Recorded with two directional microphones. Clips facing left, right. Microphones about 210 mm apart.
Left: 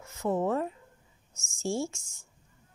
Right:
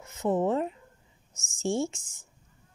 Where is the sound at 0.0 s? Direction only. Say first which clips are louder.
Right 2 dB; 20° right (ahead or behind).